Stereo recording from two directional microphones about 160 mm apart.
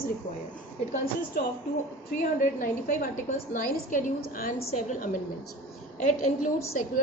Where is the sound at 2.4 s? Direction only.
55° left (ahead or behind).